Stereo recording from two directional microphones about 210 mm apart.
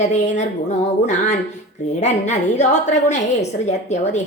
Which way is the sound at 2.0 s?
35° left (ahead or behind).